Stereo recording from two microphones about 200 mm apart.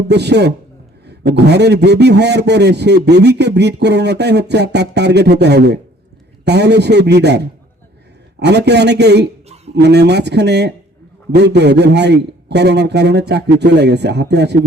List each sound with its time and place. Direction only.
0.1 s a man's voice: 55° right (ahead or behind)